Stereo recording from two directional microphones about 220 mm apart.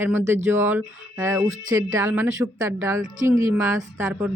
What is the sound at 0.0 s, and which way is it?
A woman's voice, 10° right (ahead or behind).